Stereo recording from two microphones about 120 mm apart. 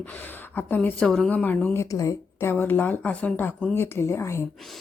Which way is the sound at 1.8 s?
30° left (ahead or behind).